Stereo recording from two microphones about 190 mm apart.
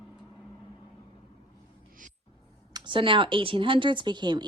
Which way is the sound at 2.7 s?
25° right (ahead or behind).